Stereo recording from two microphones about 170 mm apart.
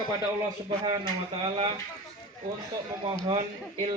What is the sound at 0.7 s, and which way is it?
Speech, 30° right (ahead or behind).